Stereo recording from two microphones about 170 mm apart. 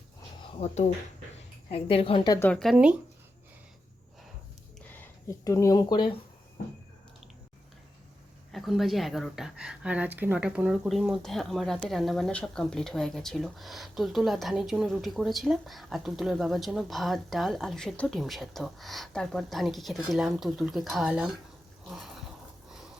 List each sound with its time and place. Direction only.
1.7 s a woman's voice: 35° left (ahead or behind)
2.4 s speech: 5° left (ahead or behind)
5.5 s speech: 20° left (ahead or behind)
8.5 s speech: centre (ahead or behind)
21.8 s a sound: centre (ahead or behind)